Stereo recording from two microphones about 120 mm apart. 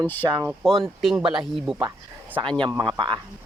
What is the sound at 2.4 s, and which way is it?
Speech, 40° right (ahead or behind).